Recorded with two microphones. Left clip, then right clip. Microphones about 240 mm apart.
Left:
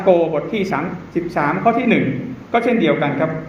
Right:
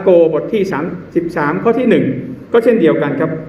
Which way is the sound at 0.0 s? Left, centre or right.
Centre.